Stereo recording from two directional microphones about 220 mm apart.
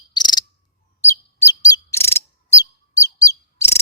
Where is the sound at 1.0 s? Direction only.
15° left (ahead or behind).